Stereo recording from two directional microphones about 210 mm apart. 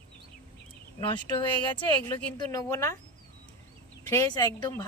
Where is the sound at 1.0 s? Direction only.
25° left (ahead or behind).